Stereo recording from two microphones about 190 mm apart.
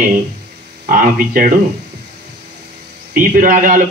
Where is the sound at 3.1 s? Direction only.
45° right (ahead or behind).